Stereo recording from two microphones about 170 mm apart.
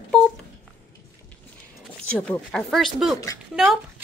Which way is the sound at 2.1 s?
5° left (ahead or behind).